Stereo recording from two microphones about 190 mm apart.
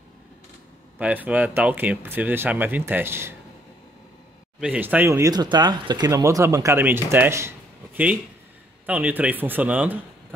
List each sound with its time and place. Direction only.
0.9 s speech: 10° right (ahead or behind)
4.6 s speech: 10° right (ahead or behind)